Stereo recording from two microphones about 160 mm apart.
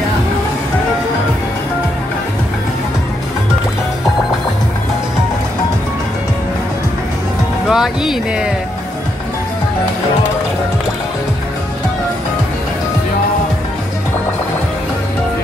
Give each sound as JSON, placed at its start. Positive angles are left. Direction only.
{"t": 7.7, "sound": "speech", "side_deg": 0}